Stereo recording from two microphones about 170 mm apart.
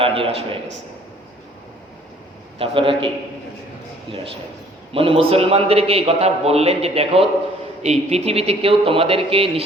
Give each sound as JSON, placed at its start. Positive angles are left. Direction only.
{"t": 0.0, "sound": "a man's voice", "side_deg": -35}
{"t": 2.6, "sound": "a man's voice", "side_deg": -30}
{"t": 4.9, "sound": "a man's voice", "side_deg": -30}